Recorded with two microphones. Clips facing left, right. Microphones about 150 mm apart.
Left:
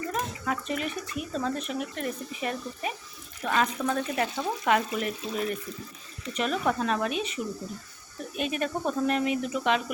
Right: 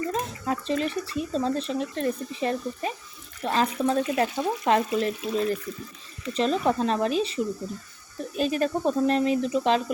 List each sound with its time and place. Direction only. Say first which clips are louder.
0.1 s speech: right 2 dB; 30° right (ahead or behind)
8.4 s speech: right 5 dB; 35° right (ahead or behind)